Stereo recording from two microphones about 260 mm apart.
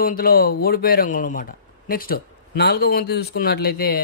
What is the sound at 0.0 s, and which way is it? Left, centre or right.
Speech, left.